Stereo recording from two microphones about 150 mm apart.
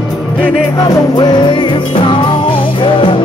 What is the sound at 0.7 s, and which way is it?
Music, 25° left (ahead or behind).